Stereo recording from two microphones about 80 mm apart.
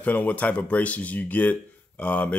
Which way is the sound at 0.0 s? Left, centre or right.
Left.